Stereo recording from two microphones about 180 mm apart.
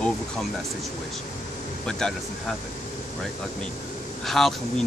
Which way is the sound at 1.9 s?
5° left (ahead or behind).